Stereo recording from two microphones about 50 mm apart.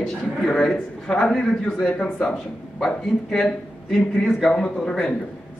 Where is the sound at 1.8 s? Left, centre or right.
Left.